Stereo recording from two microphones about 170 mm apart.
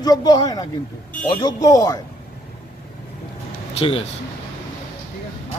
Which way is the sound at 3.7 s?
35° left (ahead or behind).